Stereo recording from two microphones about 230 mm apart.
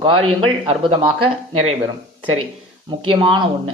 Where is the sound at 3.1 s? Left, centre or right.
Right.